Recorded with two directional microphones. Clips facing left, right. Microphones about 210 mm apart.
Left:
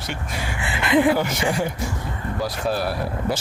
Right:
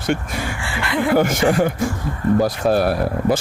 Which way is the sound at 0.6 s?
20° left (ahead or behind).